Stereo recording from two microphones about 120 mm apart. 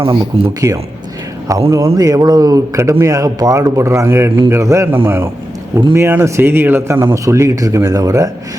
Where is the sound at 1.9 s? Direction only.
30° right (ahead or behind).